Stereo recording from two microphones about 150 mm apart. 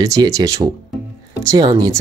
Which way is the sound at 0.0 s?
25° right (ahead or behind).